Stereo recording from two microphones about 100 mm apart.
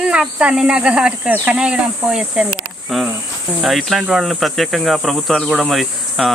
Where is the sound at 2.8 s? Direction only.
Centre (ahead or behind).